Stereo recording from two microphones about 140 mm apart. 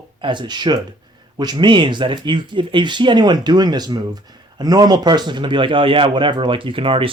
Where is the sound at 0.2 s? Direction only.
35° right (ahead or behind).